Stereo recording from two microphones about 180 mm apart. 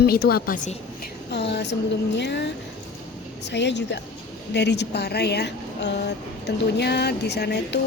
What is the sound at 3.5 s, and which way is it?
Speech, 75° left (ahead or behind).